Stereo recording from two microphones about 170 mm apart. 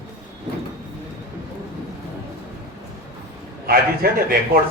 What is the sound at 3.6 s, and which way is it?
Speech, 60° right (ahead or behind).